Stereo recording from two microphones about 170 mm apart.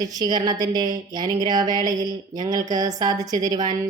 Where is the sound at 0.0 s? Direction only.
25° right (ahead or behind).